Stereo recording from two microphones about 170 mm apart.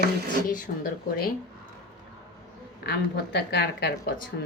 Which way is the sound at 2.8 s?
75° left (ahead or behind).